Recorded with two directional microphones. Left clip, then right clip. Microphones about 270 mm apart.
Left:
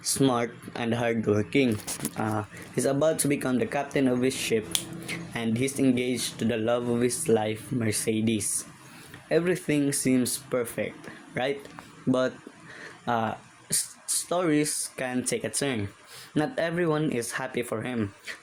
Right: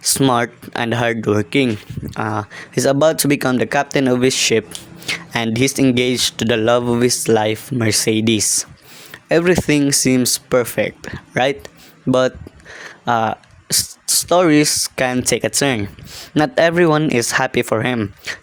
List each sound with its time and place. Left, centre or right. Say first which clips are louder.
0.0 s speech: right 10 dB; right